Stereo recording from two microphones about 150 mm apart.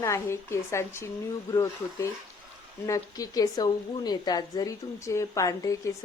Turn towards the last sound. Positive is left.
turn(degrees=20)  # may be behind; listen again after turning